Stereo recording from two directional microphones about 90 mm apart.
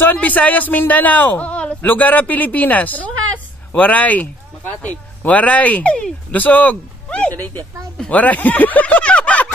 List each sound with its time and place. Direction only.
0.0 s a man's voice: 20° left (ahead or behind)